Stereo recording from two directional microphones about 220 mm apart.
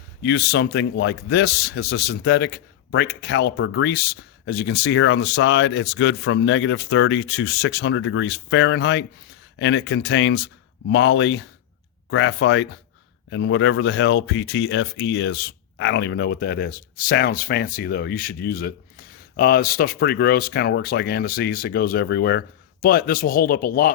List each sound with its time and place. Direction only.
0.2 s speech: 50° left (ahead or behind)